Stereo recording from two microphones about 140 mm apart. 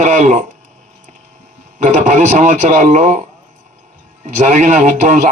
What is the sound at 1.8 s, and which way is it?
A man's voice, 60° right (ahead or behind).